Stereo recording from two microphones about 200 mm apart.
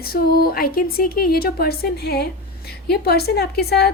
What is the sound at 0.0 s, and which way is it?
A woman's voice, 50° left (ahead or behind).